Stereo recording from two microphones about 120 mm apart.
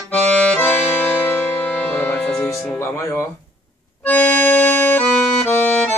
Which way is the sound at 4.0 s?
15° left (ahead or behind).